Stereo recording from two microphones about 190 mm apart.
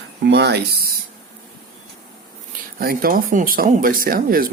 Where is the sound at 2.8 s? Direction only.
50° right (ahead or behind).